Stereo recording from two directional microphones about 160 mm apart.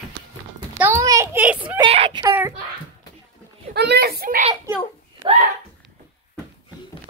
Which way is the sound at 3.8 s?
85° right.